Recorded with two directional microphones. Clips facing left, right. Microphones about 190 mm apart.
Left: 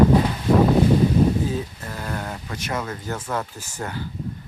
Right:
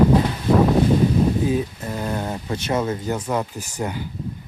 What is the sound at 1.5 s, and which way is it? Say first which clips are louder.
Speech: right 5 dB; 20° right (ahead or behind).